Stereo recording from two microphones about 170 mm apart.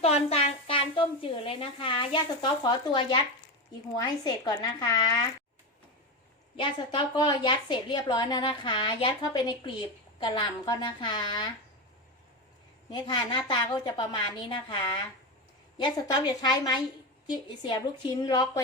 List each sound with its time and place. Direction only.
0.0 s a woman's voice: 35° left (ahead or behind)
6.6 s a woman's voice: 30° left (ahead or behind)
12.9 s a woman's voice: 25° left (ahead or behind)